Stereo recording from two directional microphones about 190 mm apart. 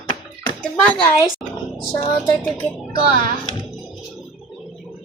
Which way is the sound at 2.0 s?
20° left (ahead or behind).